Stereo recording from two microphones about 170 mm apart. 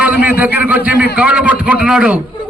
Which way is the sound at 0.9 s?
65° left (ahead or behind).